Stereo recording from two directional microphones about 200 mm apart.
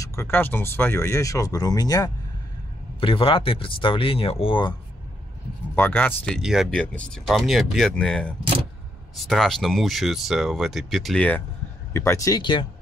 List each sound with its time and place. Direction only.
0.0 s speech: 15° left (ahead or behind)
5.8 s speech: 10° left (ahead or behind)